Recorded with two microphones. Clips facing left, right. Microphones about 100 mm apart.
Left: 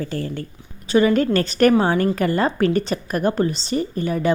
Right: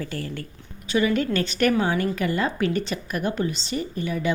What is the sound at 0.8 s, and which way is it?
A woman's voice, 40° left (ahead or behind).